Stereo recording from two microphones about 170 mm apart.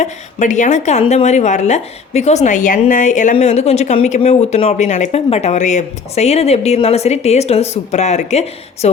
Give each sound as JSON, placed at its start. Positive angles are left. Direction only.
{"t": 0.0, "sound": "a woman's voice", "side_deg": 45}